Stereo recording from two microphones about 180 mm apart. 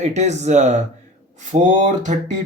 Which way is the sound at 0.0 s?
40° right (ahead or behind).